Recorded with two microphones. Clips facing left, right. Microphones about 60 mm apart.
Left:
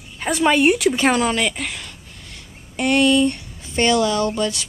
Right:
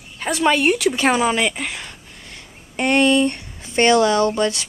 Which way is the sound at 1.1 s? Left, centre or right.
Centre.